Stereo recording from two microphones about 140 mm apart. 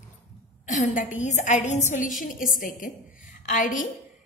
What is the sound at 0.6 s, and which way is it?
A woman's voice, 65° left (ahead or behind).